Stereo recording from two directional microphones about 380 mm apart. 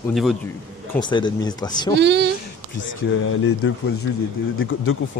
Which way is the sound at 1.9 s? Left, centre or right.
Right.